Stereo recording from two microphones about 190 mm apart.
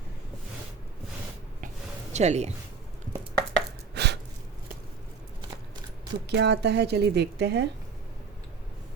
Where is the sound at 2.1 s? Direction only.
35° right (ahead or behind).